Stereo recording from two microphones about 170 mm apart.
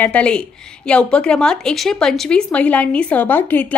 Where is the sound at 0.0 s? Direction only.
5° left (ahead or behind).